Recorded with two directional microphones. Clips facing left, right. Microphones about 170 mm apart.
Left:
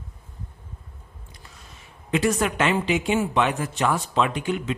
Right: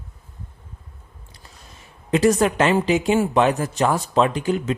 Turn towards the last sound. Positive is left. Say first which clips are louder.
# right 4 dB
turn(degrees=-35)  # may be behind; listen again after turning